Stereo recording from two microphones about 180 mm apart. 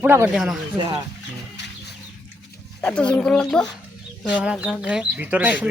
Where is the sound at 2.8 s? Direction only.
5° left (ahead or behind).